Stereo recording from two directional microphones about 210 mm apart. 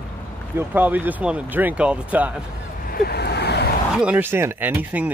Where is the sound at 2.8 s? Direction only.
45° left (ahead or behind).